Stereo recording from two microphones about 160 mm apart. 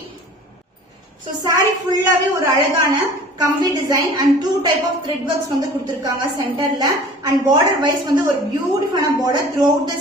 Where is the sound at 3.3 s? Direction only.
25° right (ahead or behind).